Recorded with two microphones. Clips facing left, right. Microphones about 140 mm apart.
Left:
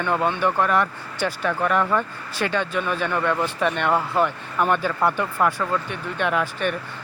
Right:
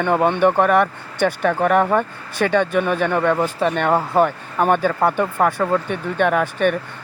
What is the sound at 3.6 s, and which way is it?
Speech, 40° right (ahead or behind).